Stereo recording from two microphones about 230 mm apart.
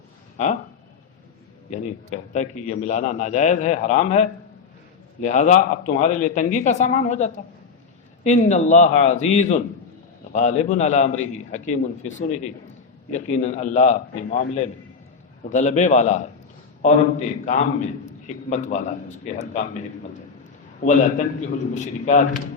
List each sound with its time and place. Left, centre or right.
2.3 s a man's voice: left
15.4 s a man's voice: left
20.8 s a man's voice: left